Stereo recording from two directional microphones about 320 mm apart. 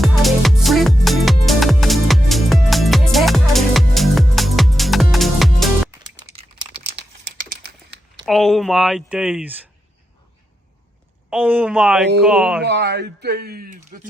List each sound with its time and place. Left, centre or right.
0.0 s music: centre
6.2 s typing: centre
6.9 s crumpling: right
8.2 s speech: centre
11.3 s speech: centre
12.6 s speech: right